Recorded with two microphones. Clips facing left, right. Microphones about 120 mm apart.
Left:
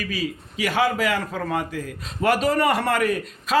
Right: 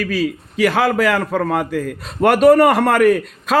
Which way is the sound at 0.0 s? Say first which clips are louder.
Right 8 dB; 90° right.